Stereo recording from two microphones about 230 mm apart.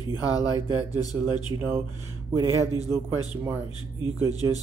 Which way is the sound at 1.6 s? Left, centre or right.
Centre.